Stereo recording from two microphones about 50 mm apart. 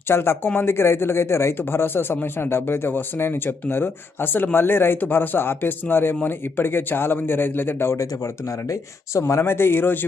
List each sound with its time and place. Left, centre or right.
0.1 s speech: left
1.5 s speech: left
7.9 s speech: left
9.4 s speech: left